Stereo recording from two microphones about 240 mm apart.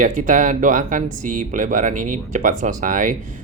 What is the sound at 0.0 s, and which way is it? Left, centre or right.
Speech, right.